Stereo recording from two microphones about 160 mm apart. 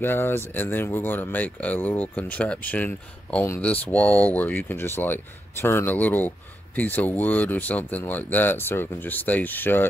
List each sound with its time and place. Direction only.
0.0 s speech: 15° left (ahead or behind)